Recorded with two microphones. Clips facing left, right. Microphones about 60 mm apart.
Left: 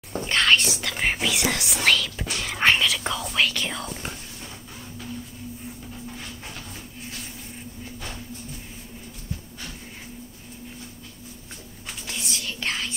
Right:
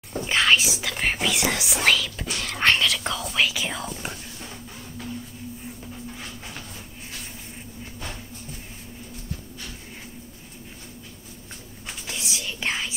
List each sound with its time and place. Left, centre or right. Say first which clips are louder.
0.3 s speech: even; centre
2.3 s whispering: left 1 dB; centre
12.1 s whispering: even; centre